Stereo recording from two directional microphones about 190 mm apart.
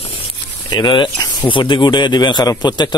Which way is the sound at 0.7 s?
25° left (ahead or behind).